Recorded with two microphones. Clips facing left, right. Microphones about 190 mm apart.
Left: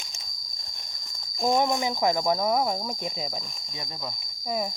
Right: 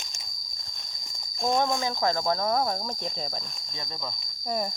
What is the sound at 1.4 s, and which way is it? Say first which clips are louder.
Speech: left 2 dB; 10° left (ahead or behind).